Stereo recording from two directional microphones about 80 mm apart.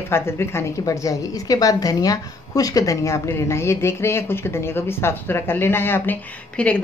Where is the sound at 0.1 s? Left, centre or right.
Left.